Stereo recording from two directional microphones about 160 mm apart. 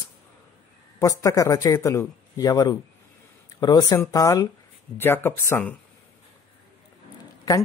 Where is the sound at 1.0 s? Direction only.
20° left (ahead or behind).